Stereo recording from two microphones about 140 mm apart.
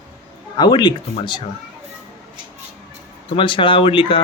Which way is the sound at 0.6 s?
30° left (ahead or behind).